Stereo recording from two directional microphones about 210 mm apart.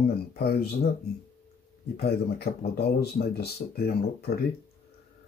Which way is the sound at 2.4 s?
50° left (ahead or behind).